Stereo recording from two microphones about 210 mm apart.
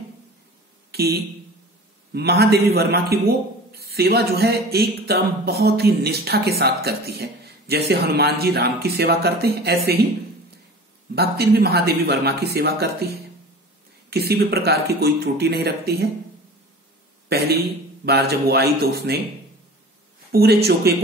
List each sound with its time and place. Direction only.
0.9 s a man's voice: 50° right (ahead or behind)
11.5 s a man's voice: 50° right (ahead or behind)
14.1 s a man's voice: 50° right (ahead or behind)
17.3 s a man's voice: 50° right (ahead or behind)
20.2 s a man's voice: 50° right (ahead or behind)